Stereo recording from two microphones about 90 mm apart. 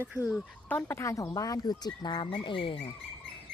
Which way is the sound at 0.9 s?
35° left (ahead or behind).